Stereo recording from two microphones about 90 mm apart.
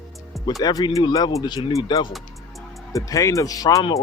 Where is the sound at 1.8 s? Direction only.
65° left (ahead or behind).